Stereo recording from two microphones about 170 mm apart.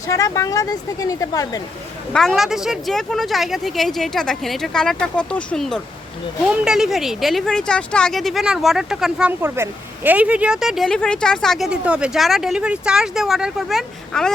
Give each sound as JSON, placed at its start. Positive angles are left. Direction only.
{"t": 0.1, "sound": "speech", "side_deg": 20}
{"t": 2.1, "sound": "speech", "side_deg": 0}